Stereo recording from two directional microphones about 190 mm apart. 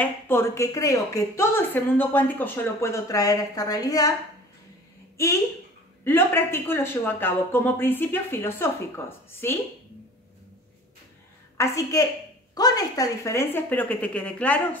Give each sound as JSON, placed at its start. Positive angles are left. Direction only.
{"t": 0.0, "sound": "a woman's voice", "side_deg": 10}
{"t": 5.1, "sound": "a woman's voice", "side_deg": 15}
{"t": 11.5, "sound": "a woman's voice", "side_deg": 15}